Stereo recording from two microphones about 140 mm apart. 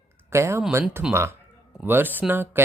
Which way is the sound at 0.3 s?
20° right (ahead or behind).